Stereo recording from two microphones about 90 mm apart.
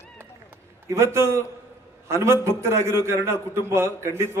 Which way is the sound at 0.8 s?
30° right (ahead or behind).